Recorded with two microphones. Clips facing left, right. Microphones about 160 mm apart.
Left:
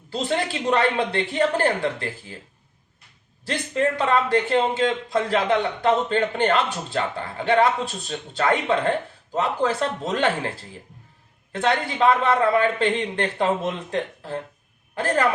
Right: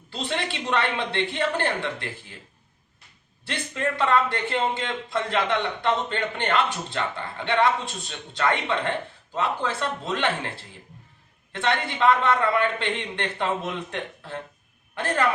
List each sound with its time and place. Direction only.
0.1 s a man's voice: 40° left (ahead or behind)
3.4 s a man's voice: 40° left (ahead or behind)
11.5 s a man's voice: 40° left (ahead or behind)